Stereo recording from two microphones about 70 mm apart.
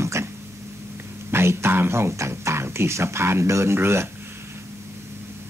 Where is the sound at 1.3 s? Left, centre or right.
Right.